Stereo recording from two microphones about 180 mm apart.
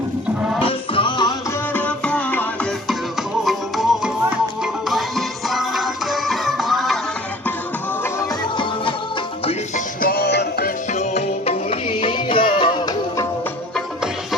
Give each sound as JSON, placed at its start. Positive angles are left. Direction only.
{"t": 0.6, "sound": "music", "side_deg": 30}
{"t": 1.7, "sound": "music", "side_deg": 5}
{"t": 8.5, "sound": "music", "side_deg": 30}
{"t": 9.5, "sound": "music", "side_deg": 45}
{"t": 10.9, "sound": "music", "side_deg": 40}